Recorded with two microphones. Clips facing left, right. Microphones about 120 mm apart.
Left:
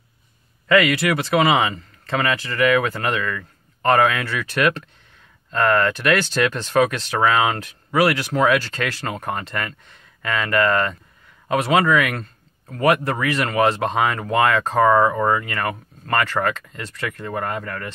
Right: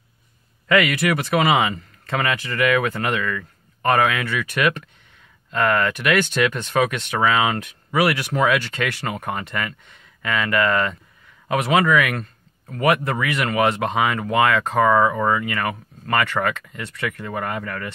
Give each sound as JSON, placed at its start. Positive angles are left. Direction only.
{"t": 0.8, "sound": "speech", "side_deg": 25}